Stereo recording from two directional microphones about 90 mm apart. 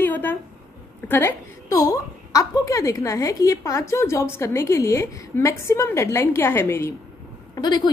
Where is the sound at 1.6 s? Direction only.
40° left (ahead or behind).